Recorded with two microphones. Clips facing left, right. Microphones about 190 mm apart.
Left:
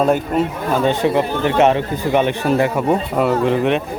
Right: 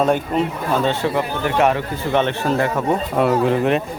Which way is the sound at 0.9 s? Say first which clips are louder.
Left 4 dB; 20° left (ahead or behind).